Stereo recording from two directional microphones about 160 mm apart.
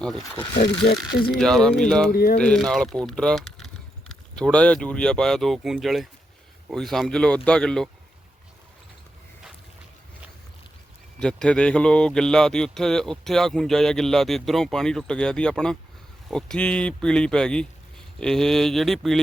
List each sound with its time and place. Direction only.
0.0 s speech: 5° left (ahead or behind)
2.1 s speech: 70° left (ahead or behind)
2.4 s speech: 5° left (ahead or behind)
11.2 s speech: 5° left (ahead or behind)